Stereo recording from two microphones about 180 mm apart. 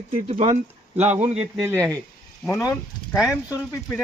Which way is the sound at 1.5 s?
15° right (ahead or behind).